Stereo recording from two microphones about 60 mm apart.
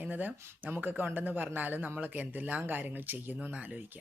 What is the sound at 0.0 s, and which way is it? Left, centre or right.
Speech, right.